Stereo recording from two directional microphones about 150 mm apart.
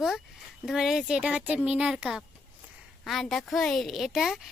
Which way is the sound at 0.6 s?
5° right (ahead or behind).